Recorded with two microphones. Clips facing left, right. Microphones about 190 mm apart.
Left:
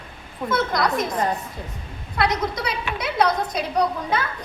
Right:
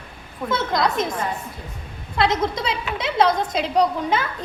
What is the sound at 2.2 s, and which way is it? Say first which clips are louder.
A woman's voice: right 2 dB; 25° right (ahead or behind).